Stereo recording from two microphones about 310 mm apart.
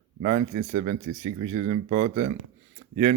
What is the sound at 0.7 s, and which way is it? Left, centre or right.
A man's voice, right.